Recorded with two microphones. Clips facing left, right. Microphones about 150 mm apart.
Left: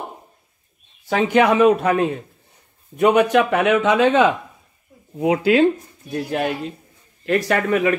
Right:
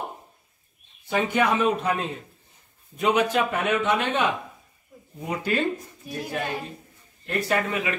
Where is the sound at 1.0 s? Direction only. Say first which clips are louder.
Left 7 dB; 90° left.